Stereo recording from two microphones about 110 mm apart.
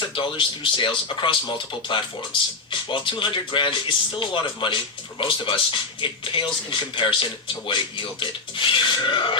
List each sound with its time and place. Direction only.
0.0 s speech: 50° left (ahead or behind)